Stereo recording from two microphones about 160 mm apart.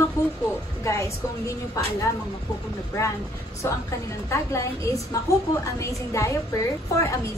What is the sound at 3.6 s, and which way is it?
A woman's voice, 20° left (ahead or behind).